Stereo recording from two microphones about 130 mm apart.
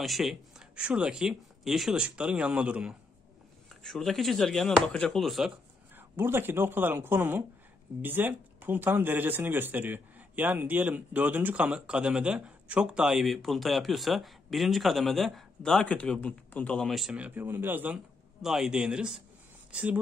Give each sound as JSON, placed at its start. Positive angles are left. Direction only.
{"t": 0.0, "sound": "speech", "side_deg": 0}
{"t": 5.9, "sound": "speech", "side_deg": -15}